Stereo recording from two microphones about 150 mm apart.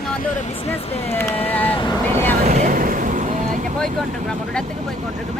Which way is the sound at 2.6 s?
65° right (ahead or behind).